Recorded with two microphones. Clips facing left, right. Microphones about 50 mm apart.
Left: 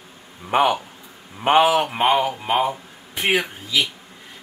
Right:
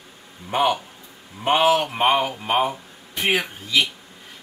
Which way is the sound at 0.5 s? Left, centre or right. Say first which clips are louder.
Left 2 dB; left.